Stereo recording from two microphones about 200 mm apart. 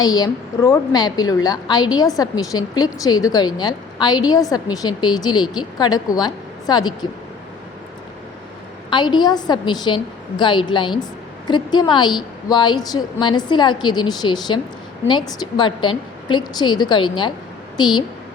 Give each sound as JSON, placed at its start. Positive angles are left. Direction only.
{"t": 0.0, "sound": "a woman's voice", "side_deg": 20}
{"t": 8.9, "sound": "a woman's voice", "side_deg": 20}